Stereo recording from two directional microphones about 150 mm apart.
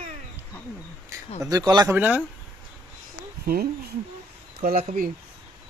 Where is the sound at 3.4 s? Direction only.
90° right.